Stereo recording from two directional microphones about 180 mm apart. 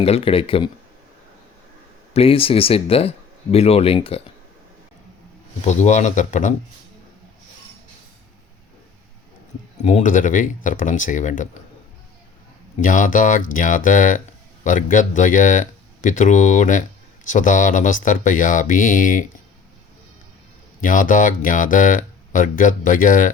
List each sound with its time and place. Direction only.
0.0 s speech: 30° left (ahead or behind)
2.1 s speech: 30° left (ahead or behind)
5.6 s speech: 40° left (ahead or behind)
9.8 s speech: 45° left (ahead or behind)
12.7 s speech: 45° left (ahead or behind)
20.8 s speech: 45° left (ahead or behind)